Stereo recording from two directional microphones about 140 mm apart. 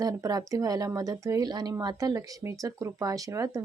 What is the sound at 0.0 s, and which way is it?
Speech, 25° right (ahead or behind).